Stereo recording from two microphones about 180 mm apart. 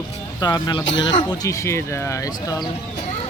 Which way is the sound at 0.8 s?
90° left.